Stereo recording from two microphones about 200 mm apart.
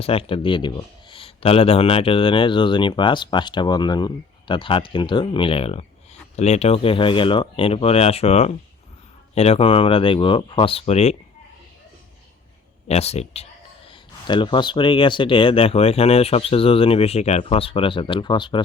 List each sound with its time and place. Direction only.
0.0 s speech: 30° left (ahead or behind)
12.9 s speech: 30° left (ahead or behind)